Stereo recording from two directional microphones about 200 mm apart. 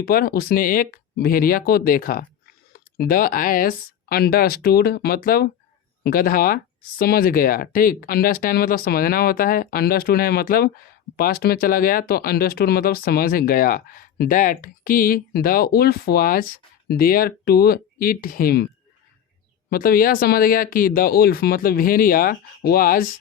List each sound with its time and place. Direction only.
0.0 s speech: 50° left (ahead or behind)
19.7 s speech: 45° left (ahead or behind)